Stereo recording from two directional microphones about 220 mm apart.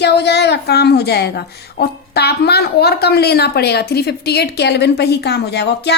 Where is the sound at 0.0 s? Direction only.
50° left (ahead or behind).